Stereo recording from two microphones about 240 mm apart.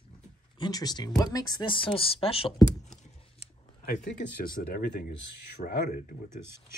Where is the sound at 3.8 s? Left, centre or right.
Left.